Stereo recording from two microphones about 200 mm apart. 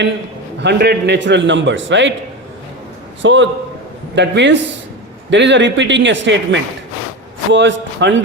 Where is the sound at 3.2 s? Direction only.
65° right (ahead or behind).